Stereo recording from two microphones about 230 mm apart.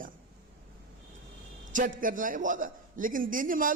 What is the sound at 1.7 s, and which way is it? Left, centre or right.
A man's voice, right.